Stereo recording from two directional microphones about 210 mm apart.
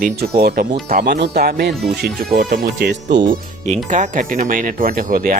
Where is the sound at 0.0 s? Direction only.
45° right (ahead or behind).